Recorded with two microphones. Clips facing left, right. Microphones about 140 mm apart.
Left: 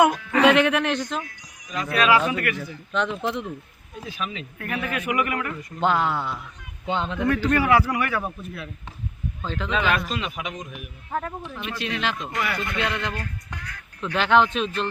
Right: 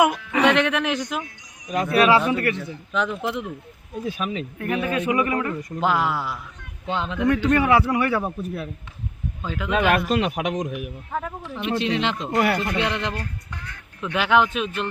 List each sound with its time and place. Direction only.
0.0 s speech: 5° right (ahead or behind)
1.9 s a man's voice: 25° right (ahead or behind)
2.9 s speech: centre (ahead or behind)
4.0 s speech: 40° right (ahead or behind)
4.5 s a man's voice: 20° right (ahead or behind)
5.8 s speech: 5° right (ahead or behind)
7.5 s a man's voice: 25° right (ahead or behind)
8.4 s speech: 40° right (ahead or behind)
9.4 s speech: 10° right (ahead or behind)
9.7 s speech: 50° right (ahead or behind)
10.1 s a man's voice: 65° right (ahead or behind); by 10.9 s 85° right
11.1 s speech: centre (ahead or behind)
11.5 s a man's voice: 25° right (ahead or behind)
14.0 s speech: 5° right (ahead or behind)